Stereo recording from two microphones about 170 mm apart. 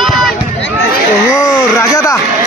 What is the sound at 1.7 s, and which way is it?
Speech, 20° left (ahead or behind).